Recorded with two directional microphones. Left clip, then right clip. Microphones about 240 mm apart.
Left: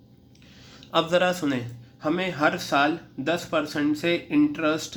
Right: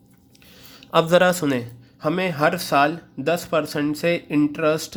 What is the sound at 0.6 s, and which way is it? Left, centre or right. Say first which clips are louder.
A man's voice: right 5 dB; right.